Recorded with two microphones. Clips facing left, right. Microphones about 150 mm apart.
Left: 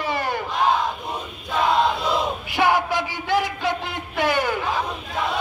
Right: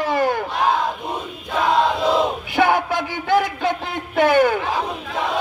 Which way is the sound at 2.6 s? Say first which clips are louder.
Right 2 dB; 50° right (ahead or behind).